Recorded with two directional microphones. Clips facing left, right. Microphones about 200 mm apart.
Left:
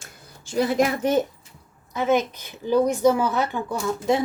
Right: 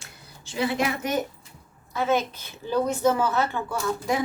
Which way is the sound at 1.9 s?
15° left (ahead or behind).